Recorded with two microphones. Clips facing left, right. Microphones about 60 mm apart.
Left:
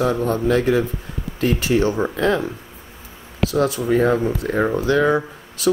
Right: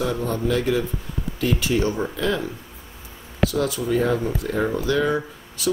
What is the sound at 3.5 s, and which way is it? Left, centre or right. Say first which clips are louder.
Speech: left 6 dB; left.